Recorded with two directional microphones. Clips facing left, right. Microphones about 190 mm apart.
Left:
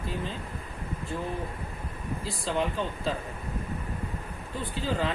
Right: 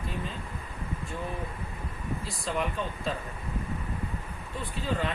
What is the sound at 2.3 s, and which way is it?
Speech, 30° left (ahead or behind).